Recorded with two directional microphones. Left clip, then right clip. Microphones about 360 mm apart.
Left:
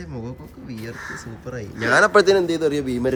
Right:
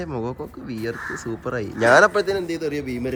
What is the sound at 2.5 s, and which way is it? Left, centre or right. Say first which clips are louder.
Speech: left 5 dB; centre.